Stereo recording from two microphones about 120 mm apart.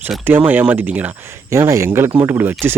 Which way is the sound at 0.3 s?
15° right (ahead or behind).